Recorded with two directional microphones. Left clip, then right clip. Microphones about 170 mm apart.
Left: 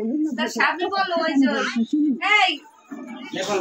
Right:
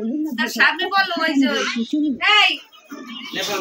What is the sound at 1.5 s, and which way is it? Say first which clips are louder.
Speech: right 2 dB; 50° left (ahead or behind).